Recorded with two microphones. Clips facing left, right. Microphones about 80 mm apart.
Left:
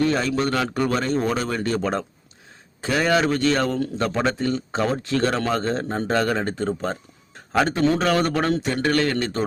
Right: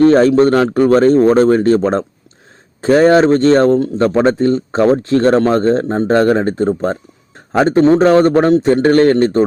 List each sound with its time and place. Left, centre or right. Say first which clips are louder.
0.0 s a man's voice: right 13 dB; right